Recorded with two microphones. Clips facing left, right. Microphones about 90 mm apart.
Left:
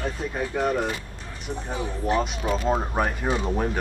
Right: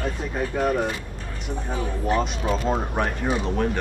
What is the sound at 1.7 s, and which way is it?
Speech, 20° left (ahead or behind).